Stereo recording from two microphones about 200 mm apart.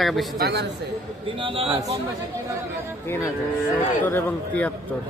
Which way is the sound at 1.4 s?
25° right (ahead or behind).